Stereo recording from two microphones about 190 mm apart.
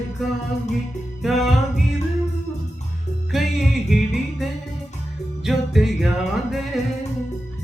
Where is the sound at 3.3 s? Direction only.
Centre (ahead or behind).